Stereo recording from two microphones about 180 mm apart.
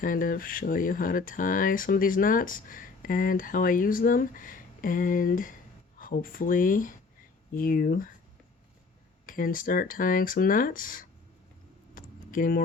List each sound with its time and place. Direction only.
0.0 s speech: 50° left (ahead or behind)
9.2 s speech: 50° left (ahead or behind)
11.9 s a sound: 50° left (ahead or behind)